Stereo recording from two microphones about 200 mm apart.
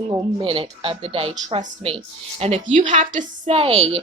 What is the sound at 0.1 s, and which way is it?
A woman's voice, 25° right (ahead or behind).